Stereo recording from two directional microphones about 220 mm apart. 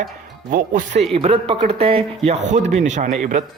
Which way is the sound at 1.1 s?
25° right (ahead or behind).